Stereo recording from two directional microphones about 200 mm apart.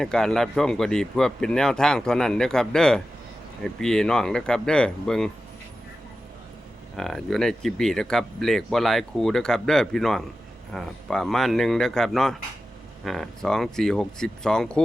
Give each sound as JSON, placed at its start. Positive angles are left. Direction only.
{"t": 0.0, "sound": "speech", "side_deg": 5}
{"t": 6.9, "sound": "speech", "side_deg": 5}